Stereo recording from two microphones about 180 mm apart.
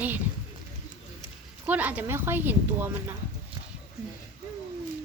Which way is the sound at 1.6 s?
10° right (ahead or behind).